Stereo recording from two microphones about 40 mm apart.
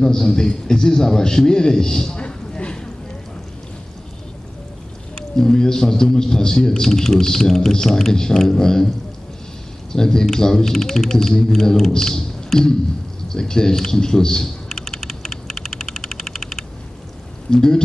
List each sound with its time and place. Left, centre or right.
0.0 s a man's voice: centre
2.1 s a sound: left
5.3 s a man's voice: centre
9.9 s a man's voice: centre
13.3 s typing: centre
17.5 s a man's voice: centre